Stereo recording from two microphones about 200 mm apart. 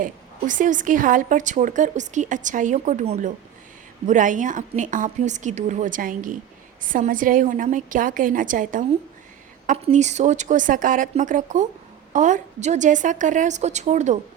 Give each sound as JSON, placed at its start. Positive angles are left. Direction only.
{"t": 0.0, "sound": "a woman's voice", "side_deg": -40}